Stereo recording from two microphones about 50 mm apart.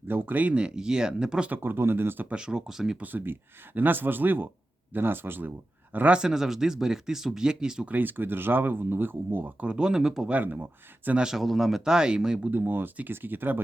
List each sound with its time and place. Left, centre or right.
0.1 s speech: right
0.4 s speech: centre
1.5 s speech: right
2.3 s speech: centre
3.0 s speech: right
6.1 s speech: centre
7.9 s speech: right
9.6 s speech: centre
10.2 s speech: right
11.3 s speech: centre
11.9 s speech: centre
12.5 s speech: right